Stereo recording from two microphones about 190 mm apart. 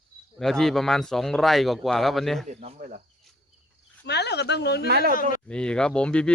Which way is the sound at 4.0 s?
60° left (ahead or behind).